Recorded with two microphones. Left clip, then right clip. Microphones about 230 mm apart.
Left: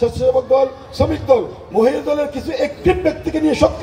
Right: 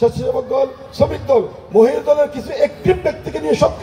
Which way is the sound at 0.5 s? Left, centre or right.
Left.